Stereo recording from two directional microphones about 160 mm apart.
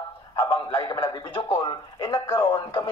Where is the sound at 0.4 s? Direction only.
30° left (ahead or behind).